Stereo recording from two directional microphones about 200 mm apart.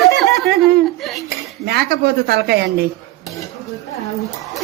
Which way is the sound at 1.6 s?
55° right (ahead or behind).